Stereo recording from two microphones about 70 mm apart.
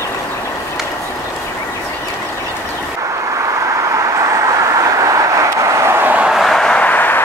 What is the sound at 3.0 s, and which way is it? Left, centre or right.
Vehicle, right.